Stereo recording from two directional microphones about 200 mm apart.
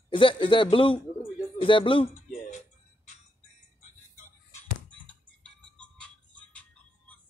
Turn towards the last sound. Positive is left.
turn(degrees=5)  # may be behind; listen again after turning